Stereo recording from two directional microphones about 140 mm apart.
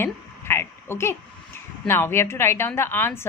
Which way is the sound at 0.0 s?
15° left (ahead or behind).